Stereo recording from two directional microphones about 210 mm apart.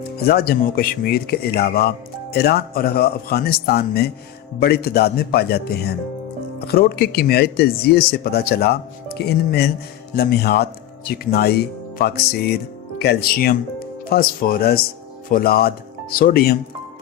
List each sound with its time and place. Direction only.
0.2 s speech: 45° left (ahead or behind)